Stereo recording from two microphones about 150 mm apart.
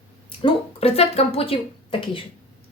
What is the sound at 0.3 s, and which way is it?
A woman's voice, 40° left (ahead or behind).